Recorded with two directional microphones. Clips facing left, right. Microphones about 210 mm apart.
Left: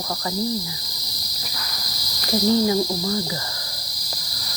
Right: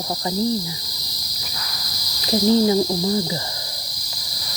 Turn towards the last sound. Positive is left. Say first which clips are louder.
# right 3 dB
turn(degrees=-20)  # may be behind; listen again after turning